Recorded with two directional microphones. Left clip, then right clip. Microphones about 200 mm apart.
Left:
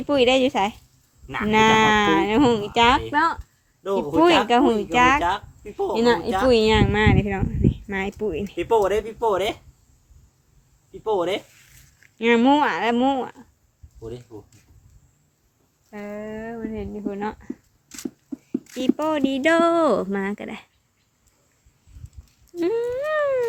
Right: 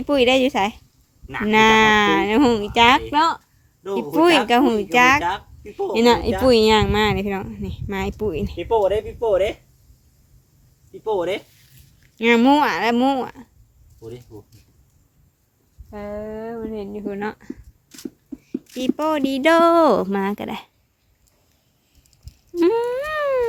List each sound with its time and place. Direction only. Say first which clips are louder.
0.0 s speech: right 2 dB; 35° right (ahead or behind)
3.8 s speech: left 1 dB; 5° left (ahead or behind)
4.4 s speech: right 1 dB; 30° right (ahead or behind)
5.2 s speech: left 1 dB; 5° left (ahead or behind)
6.0 s speech: right 4 dB; 40° right (ahead or behind)
8.5 s speech: right 1 dB; 60° left (ahead or behind)
11.0 s speech: even; 10° left (ahead or behind)
12.1 s speech: right 2 dB; 25° right (ahead or behind)
14.3 s speech: left 1 dB; 15° left (ahead or behind)
15.9 s speech: right 3 dB; 25° right (ahead or behind)
17.8 s a sound: left 1 dB; 5° left (ahead or behind)
18.9 s speech: right 4 dB; 25° right (ahead or behind)
22.5 s speech: right 5 dB; 30° right (ahead or behind)